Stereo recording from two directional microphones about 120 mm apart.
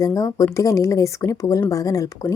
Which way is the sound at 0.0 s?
30° left (ahead or behind).